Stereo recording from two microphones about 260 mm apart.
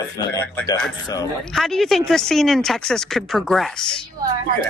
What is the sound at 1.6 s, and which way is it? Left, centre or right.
Speech, centre.